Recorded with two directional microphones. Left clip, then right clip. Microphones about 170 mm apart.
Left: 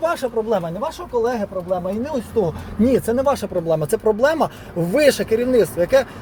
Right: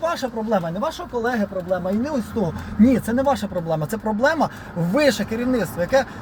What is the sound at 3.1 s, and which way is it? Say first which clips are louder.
Speech: left 2 dB; 35° left (ahead or behind).